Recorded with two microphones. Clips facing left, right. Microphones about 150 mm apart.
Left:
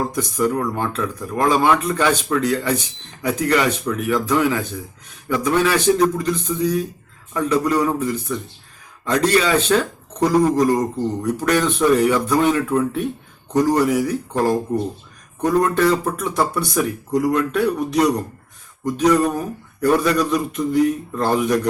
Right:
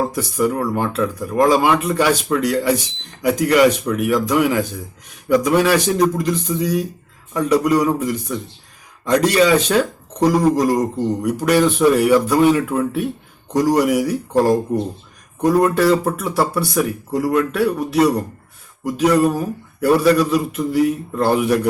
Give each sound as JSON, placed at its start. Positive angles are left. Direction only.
{"t": 0.1, "sound": "speech", "side_deg": -10}